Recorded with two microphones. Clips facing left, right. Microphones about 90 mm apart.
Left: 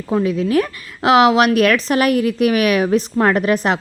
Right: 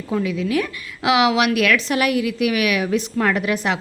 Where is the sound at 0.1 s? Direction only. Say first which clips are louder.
Left 5 dB; 35° left (ahead or behind).